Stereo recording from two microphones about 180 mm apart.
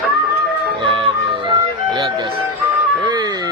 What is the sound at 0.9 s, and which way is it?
Music, 30° right (ahead or behind).